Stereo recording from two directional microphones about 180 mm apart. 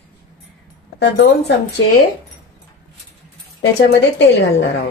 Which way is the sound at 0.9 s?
70° left (ahead or behind).